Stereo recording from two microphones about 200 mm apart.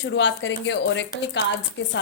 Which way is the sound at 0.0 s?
65° left (ahead or behind).